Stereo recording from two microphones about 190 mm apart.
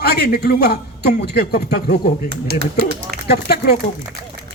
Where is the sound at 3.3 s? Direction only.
55° left (ahead or behind).